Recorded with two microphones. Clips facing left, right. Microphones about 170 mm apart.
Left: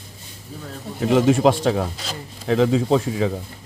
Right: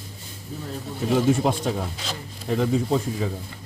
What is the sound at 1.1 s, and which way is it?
Speech, 80° left.